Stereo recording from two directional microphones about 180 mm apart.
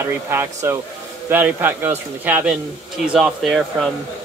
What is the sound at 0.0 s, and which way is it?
A man's voice, 15° right (ahead or behind).